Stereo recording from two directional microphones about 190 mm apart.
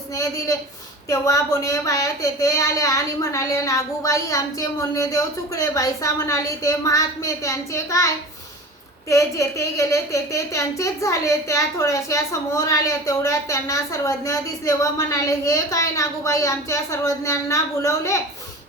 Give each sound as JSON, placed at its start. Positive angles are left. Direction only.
{"t": 1.1, "sound": "speech", "side_deg": 15}